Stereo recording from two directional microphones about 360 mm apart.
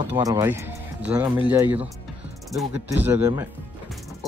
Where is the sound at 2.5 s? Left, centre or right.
Centre.